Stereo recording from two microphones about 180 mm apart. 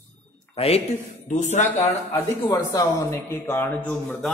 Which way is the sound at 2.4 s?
20° left (ahead or behind).